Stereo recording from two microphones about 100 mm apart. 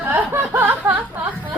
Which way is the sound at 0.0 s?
20° right (ahead or behind).